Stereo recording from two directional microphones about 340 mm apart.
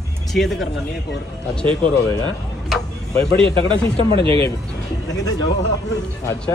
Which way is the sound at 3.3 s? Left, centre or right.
Centre.